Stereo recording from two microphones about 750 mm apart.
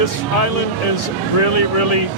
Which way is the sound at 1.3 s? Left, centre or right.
Left.